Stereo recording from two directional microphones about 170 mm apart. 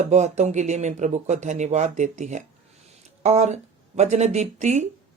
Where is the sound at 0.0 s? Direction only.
40° right (ahead or behind).